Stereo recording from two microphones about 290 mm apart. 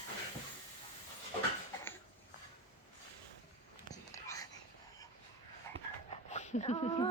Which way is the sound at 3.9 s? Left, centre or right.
Centre.